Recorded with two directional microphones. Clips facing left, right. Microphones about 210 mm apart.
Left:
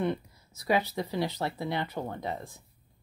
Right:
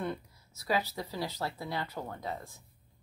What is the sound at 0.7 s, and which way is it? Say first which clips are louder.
Speech: left 5 dB; 20° left (ahead or behind).